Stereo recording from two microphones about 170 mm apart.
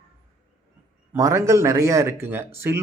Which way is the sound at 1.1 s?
20° right (ahead or behind).